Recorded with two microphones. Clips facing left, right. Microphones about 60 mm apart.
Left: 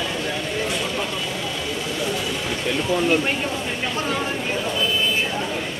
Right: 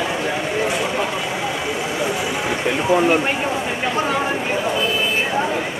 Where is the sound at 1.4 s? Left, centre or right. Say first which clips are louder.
Right 4 dB; right.